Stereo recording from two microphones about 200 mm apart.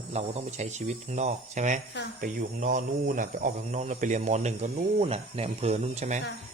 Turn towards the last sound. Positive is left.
turn(degrees=-35)  # may be behind; listen again after turning